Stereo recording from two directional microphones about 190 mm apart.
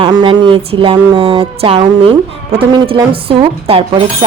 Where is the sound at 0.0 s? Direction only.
25° right (ahead or behind).